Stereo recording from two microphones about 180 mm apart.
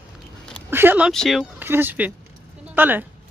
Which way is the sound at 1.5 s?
10° right (ahead or behind).